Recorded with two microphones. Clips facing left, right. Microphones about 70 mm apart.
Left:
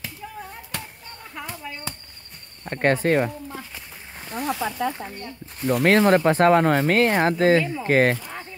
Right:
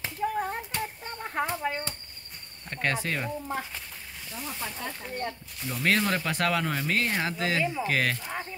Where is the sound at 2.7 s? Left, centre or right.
Left.